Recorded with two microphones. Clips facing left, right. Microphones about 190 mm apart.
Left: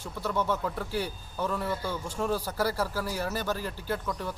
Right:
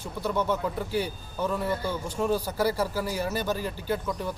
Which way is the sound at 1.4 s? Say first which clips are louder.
Right 3 dB; centre (ahead or behind).